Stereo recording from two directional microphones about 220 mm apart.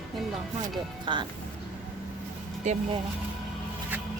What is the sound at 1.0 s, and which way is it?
Speech, 20° right (ahead or behind).